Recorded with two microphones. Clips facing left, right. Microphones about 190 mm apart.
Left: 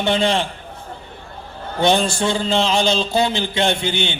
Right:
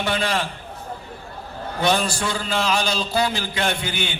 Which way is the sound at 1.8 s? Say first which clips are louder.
Left 4 dB; 25° left (ahead or behind).